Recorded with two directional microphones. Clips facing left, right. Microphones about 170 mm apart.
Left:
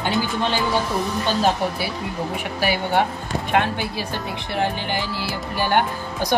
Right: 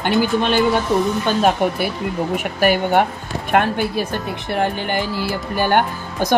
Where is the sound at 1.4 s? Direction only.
60° right (ahead or behind).